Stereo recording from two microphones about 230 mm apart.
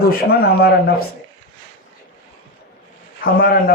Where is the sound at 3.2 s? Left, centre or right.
Left.